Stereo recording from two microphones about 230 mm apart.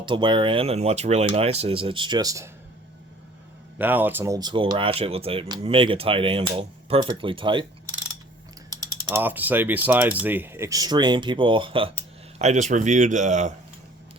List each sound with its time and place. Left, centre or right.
0.0 s speech: right
3.8 s speech: centre
9.0 s speech: centre; by 13.5 s right